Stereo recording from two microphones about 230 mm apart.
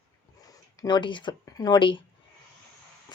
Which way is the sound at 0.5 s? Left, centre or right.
Centre.